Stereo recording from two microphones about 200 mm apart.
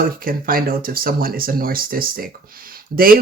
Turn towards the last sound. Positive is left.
turn(degrees=-45)  # may be behind; listen again after turning